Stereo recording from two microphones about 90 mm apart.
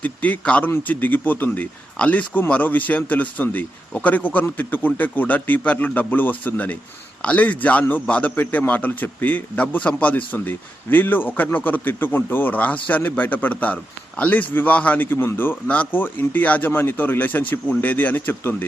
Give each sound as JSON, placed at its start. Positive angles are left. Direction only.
{"t": 0.0, "sound": "a man's voice", "side_deg": 15}